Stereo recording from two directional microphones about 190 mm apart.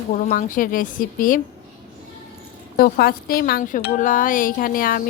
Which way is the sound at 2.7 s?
50° left (ahead or behind).